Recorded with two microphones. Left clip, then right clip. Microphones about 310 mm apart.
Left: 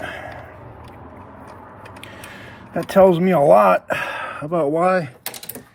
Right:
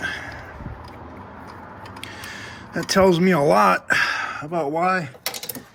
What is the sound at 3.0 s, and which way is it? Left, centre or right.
Speech, centre.